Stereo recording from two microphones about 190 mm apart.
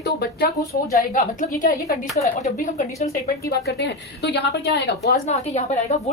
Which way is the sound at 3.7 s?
60° left (ahead or behind).